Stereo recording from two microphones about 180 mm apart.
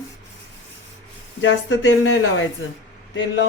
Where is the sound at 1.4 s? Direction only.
90° left.